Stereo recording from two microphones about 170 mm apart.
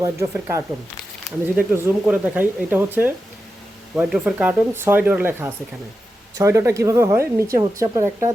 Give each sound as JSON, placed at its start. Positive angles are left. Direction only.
{"t": 0.0, "sound": "a woman's voice", "side_deg": -15}
{"t": 4.1, "sound": "a woman's voice", "side_deg": -10}